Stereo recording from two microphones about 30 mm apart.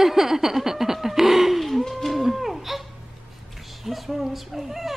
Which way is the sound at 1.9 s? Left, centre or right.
Centre.